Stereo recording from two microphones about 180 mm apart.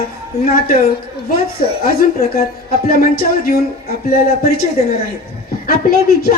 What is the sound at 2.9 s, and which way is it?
Speech, 55° left (ahead or behind).